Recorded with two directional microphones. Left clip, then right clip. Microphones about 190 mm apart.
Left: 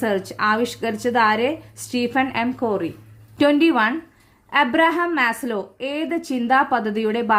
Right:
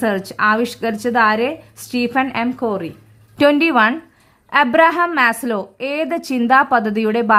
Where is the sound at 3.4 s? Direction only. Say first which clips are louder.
Right 4 dB; 25° right (ahead or behind).